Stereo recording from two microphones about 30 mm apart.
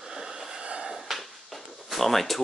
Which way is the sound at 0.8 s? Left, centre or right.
Centre.